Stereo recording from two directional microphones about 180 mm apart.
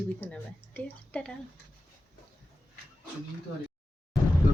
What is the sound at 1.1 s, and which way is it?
Speech, 10° left (ahead or behind).